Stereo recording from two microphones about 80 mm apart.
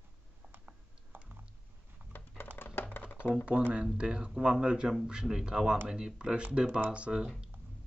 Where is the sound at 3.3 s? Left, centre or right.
Centre.